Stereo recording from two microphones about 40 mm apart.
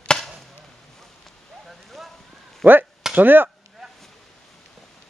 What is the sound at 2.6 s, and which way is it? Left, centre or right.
Speech, right.